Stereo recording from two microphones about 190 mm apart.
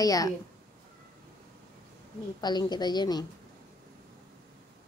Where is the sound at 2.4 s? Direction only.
20° left (ahead or behind).